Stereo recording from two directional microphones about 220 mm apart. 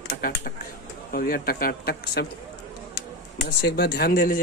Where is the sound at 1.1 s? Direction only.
40° left (ahead or behind).